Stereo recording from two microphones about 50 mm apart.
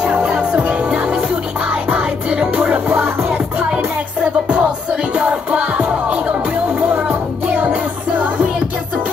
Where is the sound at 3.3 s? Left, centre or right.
Right.